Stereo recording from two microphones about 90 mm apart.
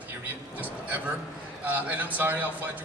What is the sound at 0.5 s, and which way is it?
A man's voice, 20° right (ahead or behind).